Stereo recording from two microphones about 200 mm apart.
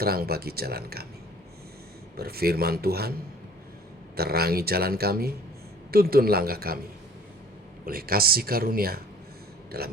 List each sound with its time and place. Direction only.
0.0 s speech: 50° right (ahead or behind)
2.1 s speech: 50° right (ahead or behind)
4.2 s speech: 50° right (ahead or behind)
7.9 s speech: 50° right (ahead or behind)